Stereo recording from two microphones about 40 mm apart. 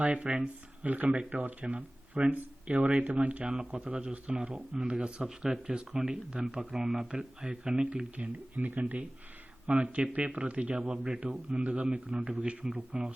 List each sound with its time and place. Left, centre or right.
0.0 s speech: right
0.9 s speech: right
1.6 s speech: right
2.3 s speech: right
3.7 s speech: right
8.1 s speech: right